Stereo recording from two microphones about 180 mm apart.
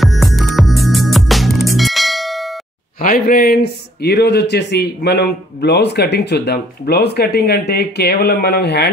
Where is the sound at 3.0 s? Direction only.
50° left (ahead or behind).